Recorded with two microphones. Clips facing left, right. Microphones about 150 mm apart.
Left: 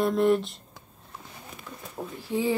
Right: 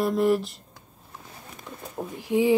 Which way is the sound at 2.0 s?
15° right (ahead or behind).